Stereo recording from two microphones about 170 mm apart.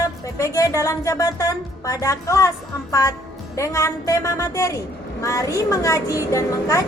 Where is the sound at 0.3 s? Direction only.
20° left (ahead or behind).